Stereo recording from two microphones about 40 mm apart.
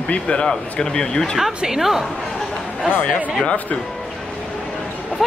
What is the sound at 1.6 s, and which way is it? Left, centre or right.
Speech, centre.